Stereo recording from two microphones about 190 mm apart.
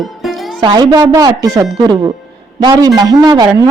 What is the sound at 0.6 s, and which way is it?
Speech, 20° right (ahead or behind).